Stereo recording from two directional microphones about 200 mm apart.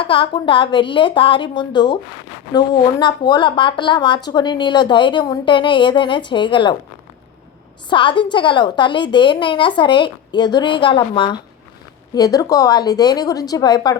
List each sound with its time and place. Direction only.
0.0 s speech: 25° left (ahead or behind)
7.9 s speech: 25° left (ahead or behind)